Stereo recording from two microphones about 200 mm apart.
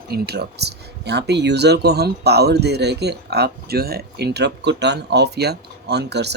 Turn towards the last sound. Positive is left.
turn(degrees=-55)  # may be behind; listen again after turning